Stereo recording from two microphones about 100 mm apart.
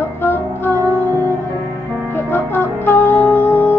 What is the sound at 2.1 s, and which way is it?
Music, 25° left (ahead or behind).